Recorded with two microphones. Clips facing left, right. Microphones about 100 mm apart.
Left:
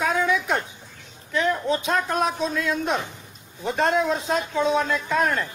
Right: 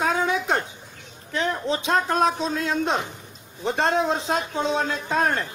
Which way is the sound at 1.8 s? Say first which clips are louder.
Right 2 dB; 30° right (ahead or behind).